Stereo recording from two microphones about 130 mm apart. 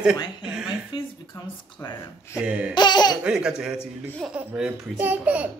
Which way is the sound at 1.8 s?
25° left (ahead or behind).